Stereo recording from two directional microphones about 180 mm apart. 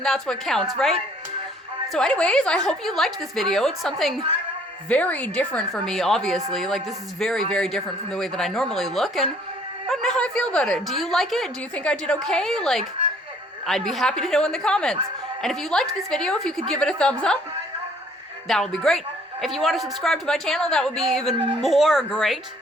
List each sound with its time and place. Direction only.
0.0 s speech: centre (ahead or behind)
1.9 s speech: 5° left (ahead or behind)
18.4 s speech: centre (ahead or behind)
21.3 s a woman's voice: 30° right (ahead or behind)
21.6 s speech: centre (ahead or behind)